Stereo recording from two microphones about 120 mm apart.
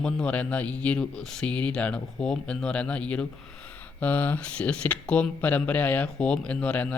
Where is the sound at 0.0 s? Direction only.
10° left (ahead or behind).